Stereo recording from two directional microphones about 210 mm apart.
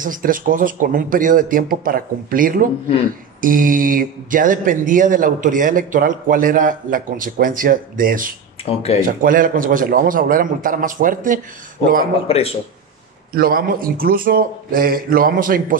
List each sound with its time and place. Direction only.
0.0 s speech: 40° right (ahead or behind)
8.6 s speech: 30° left (ahead or behind)
9.0 s speech: 40° right (ahead or behind)
12.3 s speech: 30° left (ahead or behind)
13.3 s a man's voice: 45° right (ahead or behind)